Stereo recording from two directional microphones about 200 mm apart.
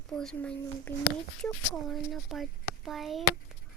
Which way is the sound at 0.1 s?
5° left (ahead or behind).